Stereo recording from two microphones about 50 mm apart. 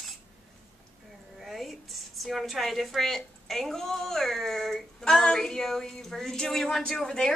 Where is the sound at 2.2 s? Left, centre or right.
Centre.